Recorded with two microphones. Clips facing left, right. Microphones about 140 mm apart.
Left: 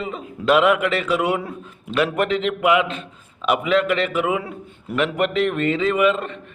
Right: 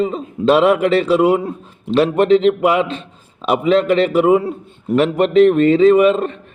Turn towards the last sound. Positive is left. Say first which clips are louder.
# right 8 dB
turn(degrees=-35)  # may be behind; listen again after turning